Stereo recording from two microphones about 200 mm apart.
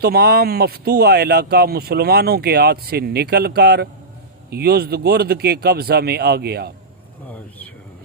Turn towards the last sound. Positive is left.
turn(degrees=-55)  # may be behind; listen again after turning